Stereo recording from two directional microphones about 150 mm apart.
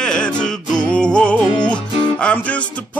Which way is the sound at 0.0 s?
5° left (ahead or behind).